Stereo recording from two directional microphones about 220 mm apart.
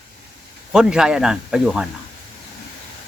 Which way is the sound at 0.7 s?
5° right (ahead or behind).